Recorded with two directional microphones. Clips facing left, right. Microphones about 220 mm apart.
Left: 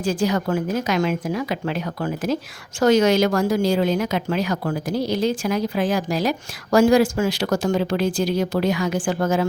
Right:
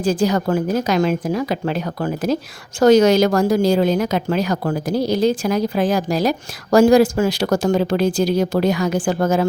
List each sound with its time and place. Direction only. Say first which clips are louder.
0.0 s a woman's voice: right 4 dB; 35° right (ahead or behind)